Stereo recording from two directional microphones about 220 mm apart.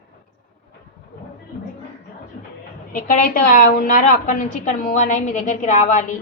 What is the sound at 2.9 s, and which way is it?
A woman's voice, 40° left (ahead or behind).